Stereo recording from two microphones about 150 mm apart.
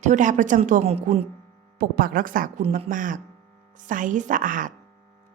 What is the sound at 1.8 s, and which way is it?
A woman's voice, 70° right (ahead or behind).